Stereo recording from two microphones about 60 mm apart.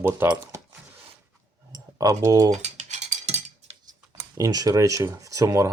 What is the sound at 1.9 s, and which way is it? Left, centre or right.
Speech, right.